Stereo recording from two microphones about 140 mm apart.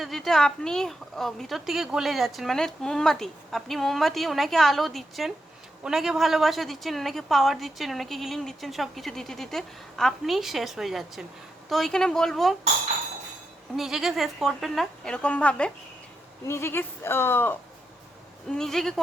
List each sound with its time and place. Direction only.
0.0 s a woman's voice: centre (ahead or behind)
13.7 s a woman's voice: centre (ahead or behind); by 17.6 s 15° left (ahead or behind)
18.4 s a woman's voice: 5° left (ahead or behind)